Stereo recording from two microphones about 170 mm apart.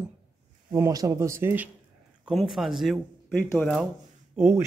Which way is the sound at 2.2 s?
Centre (ahead or behind).